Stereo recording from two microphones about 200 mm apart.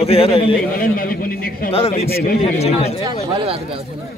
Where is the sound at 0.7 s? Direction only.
45° left (ahead or behind).